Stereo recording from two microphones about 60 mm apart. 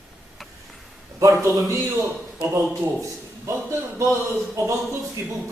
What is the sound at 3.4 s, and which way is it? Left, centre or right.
Speech, right.